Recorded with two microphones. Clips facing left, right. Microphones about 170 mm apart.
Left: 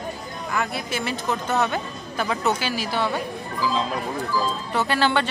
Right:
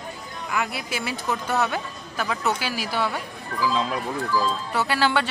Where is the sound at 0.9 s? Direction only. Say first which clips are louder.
Left 2 dB; 5° right (ahead or behind).